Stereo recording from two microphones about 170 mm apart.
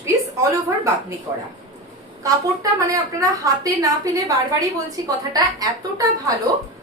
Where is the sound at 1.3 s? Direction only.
30° right (ahead or behind).